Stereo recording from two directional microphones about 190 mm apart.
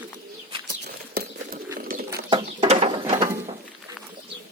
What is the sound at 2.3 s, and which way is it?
Bird, 30° right (ahead or behind).